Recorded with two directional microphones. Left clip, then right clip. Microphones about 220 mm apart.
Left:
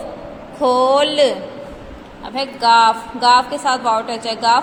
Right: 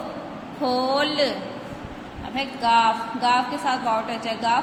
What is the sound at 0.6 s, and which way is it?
A woman's voice, 30° left (ahead or behind).